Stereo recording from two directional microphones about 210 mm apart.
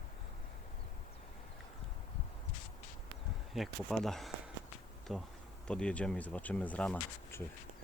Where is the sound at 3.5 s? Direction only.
Centre (ahead or behind).